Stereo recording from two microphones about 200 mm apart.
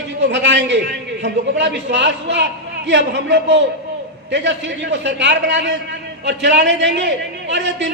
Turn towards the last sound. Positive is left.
turn(degrees=-60)  # may be behind; listen again after turning